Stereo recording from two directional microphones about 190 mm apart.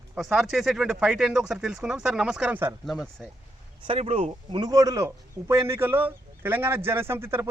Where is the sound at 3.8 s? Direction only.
30° right (ahead or behind).